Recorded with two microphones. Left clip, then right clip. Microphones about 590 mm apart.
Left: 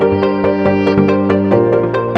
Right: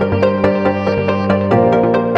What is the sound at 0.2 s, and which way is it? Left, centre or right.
Music, centre.